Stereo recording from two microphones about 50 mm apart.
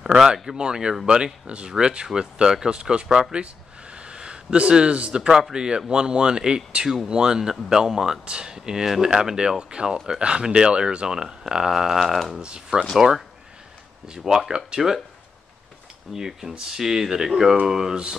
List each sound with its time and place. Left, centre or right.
0.0 s speech: centre
12.0 s speech: centre
12.3 s speech: centre
14.0 s speech: centre
16.2 s speech: centre